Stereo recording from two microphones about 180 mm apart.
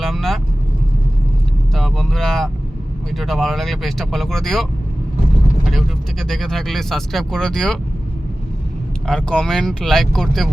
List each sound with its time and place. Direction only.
0.0 s vehicle: centre (ahead or behind)
1.7 s speech: centre (ahead or behind)
5.7 s speech: centre (ahead or behind)
9.0 s speech: 5° left (ahead or behind)